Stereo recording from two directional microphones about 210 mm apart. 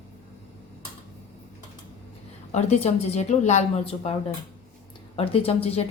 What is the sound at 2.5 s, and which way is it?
A woman's voice, 30° left (ahead or behind).